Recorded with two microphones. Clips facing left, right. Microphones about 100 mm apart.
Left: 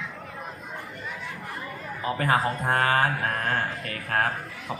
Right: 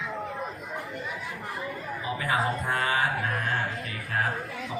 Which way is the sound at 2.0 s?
50° left (ahead or behind).